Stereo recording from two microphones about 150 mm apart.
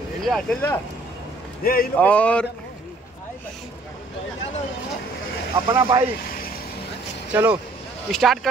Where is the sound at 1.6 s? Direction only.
80° left.